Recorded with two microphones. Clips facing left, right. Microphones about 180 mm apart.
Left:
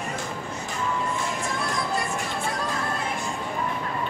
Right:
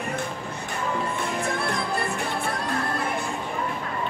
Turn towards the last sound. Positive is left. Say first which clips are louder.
# right 1 dB
turn(degrees=-60)  # may be behind; listen again after turning